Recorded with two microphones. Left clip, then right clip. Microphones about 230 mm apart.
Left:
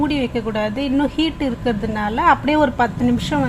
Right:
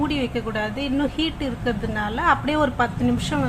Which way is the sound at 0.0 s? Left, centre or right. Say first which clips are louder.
Left 4 dB; centre.